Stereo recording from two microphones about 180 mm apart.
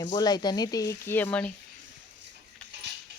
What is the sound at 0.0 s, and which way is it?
Speech, 25° left (ahead or behind).